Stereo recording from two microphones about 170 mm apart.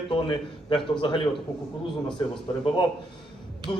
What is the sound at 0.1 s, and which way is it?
A man's voice, 30° left (ahead or behind).